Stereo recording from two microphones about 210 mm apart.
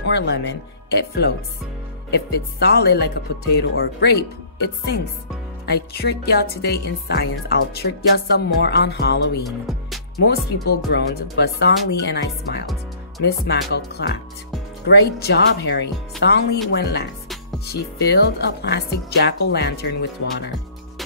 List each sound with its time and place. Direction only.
0.0 s speech: 55° left (ahead or behind)
9.7 s music: centre (ahead or behind)
10.2 s speech: 50° left (ahead or behind)